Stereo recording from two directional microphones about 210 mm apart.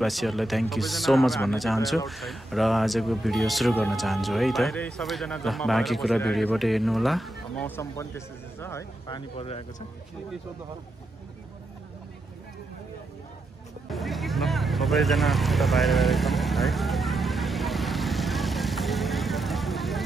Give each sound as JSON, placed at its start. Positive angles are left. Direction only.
{"t": 0.0, "sound": "speech", "side_deg": 0}
{"t": 13.8, "sound": "vehicle", "side_deg": 0}